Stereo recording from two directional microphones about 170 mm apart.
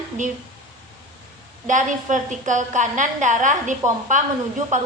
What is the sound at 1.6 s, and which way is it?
A woman's voice, 50° right (ahead or behind).